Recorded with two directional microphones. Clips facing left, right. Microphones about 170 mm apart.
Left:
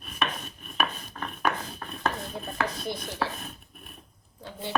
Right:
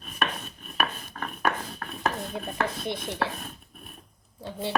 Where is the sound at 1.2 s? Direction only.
5° right (ahead or behind).